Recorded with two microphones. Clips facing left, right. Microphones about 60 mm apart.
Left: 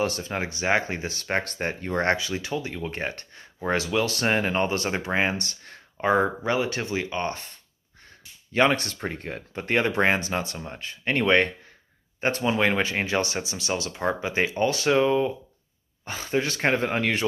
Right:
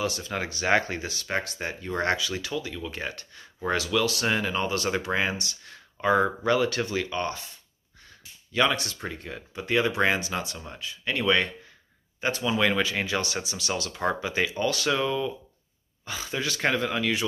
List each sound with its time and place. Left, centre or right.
0.0 s speech: left
0.3 s speech: left
5.9 s speech: left
8.5 s speech: left